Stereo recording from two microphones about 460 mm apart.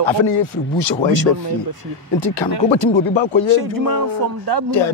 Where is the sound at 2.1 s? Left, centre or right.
Left.